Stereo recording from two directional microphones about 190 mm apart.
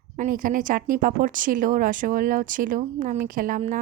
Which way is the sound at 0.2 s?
45° right (ahead or behind).